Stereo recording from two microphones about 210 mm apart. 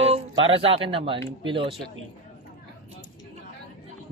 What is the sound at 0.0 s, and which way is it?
A woman's voice, 30° right (ahead or behind).